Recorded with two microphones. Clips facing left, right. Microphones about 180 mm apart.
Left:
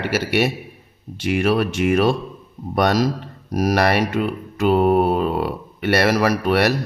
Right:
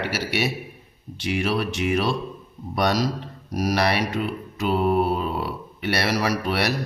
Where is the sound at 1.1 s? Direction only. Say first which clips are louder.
Left 6 dB; 50° left (ahead or behind).